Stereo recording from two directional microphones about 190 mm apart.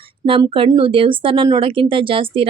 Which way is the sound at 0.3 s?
30° right (ahead or behind).